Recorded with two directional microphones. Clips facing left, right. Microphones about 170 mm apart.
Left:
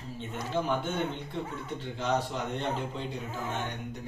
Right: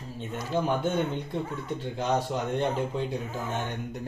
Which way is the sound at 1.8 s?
45° right (ahead or behind).